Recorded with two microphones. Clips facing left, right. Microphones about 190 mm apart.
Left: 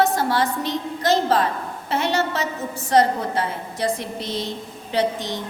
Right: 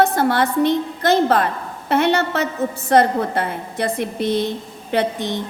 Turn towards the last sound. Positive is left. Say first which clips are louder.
# right 2 dB
turn(degrees=-55)  # may be behind; listen again after turning